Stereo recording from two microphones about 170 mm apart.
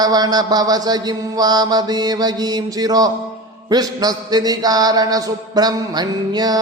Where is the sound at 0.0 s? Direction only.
25° right (ahead or behind).